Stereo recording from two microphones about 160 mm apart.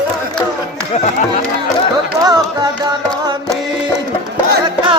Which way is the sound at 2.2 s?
25° right (ahead or behind).